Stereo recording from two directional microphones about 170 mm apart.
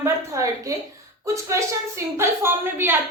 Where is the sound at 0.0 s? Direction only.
20° right (ahead or behind).